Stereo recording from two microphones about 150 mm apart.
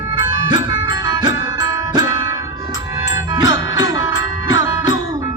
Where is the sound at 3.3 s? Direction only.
25° right (ahead or behind).